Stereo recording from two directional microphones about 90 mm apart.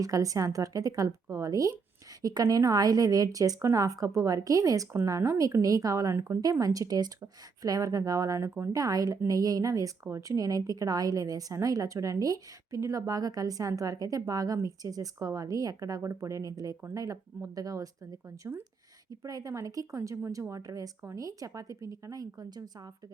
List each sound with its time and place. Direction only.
0.0 s a woman's voice: 40° right (ahead or behind)
8.7 s a woman's voice: 45° right (ahead or behind)